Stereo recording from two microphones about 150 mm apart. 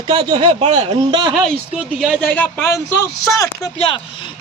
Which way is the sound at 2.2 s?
10° left (ahead or behind).